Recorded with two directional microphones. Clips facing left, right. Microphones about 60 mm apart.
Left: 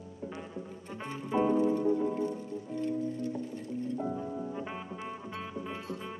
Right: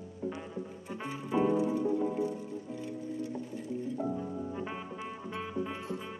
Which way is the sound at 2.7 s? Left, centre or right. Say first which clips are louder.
Left 7 dB; centre.